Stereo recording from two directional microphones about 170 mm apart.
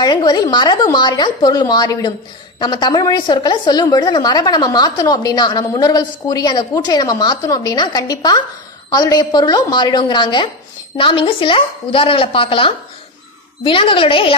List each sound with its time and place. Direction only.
0.0 s a woman's voice: 25° left (ahead or behind)